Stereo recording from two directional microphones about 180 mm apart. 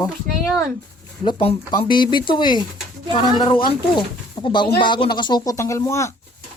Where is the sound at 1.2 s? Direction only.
35° left (ahead or behind).